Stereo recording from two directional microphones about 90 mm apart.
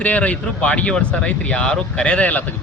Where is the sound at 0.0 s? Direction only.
15° left (ahead or behind).